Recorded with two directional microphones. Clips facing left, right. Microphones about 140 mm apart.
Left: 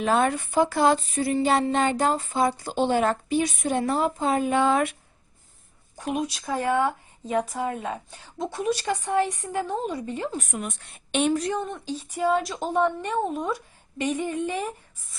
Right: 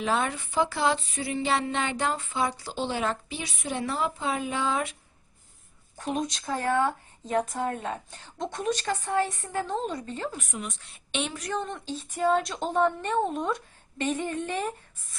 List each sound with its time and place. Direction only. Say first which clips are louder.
0.0 s speech: left 5 dB; 50° left (ahead or behind)
6.0 s a woman's voice: left 2 dB; 10° left (ahead or behind)
10.3 s speech: left 5 dB; 50° left (ahead or behind)
11.5 s a woman's voice: left 2 dB; 10° left (ahead or behind)